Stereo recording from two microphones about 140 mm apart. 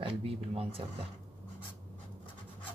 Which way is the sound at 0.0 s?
45° right (ahead or behind).